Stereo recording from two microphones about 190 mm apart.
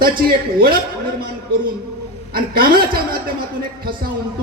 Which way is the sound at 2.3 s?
50° right (ahead or behind).